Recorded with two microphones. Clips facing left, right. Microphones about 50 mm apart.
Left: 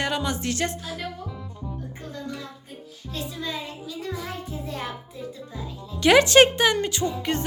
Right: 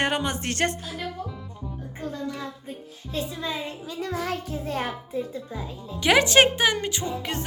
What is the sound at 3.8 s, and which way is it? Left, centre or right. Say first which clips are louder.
Music: right 6 dB; right.